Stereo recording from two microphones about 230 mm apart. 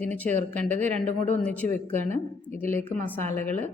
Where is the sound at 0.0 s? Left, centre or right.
Centre.